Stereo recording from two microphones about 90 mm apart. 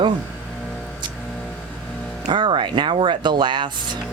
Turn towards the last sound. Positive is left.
turn(degrees=-60)  # may be behind; listen again after turning